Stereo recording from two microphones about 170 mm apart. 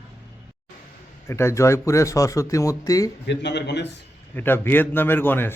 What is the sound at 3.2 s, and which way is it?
Speech, 90° left.